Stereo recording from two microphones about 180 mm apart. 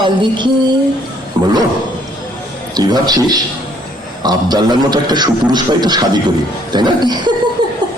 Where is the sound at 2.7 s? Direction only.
20° right (ahead or behind).